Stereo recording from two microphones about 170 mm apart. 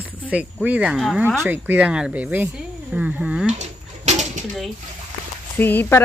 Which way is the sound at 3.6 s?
45° right (ahead or behind).